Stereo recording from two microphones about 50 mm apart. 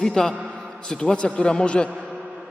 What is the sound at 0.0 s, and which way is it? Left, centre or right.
A man's voice, centre.